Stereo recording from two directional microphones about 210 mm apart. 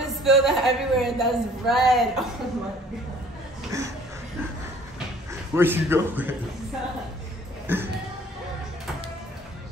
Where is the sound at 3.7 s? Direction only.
15° right (ahead or behind).